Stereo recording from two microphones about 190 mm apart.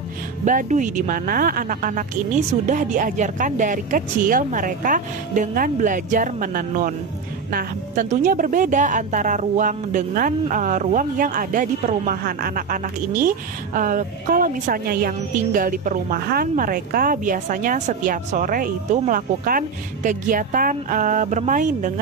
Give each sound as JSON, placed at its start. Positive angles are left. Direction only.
{"t": 0.5, "sound": "a woman's voice", "side_deg": -45}